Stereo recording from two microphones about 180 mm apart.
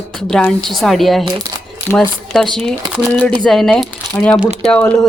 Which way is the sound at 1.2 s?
20° right (ahead or behind).